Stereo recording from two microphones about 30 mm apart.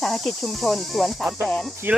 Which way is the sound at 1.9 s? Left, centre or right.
Right.